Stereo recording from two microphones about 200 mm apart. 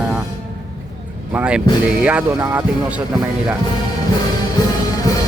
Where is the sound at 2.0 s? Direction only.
5° right (ahead or behind).